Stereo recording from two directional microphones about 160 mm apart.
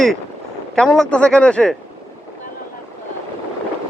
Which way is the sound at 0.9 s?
5° left (ahead or behind).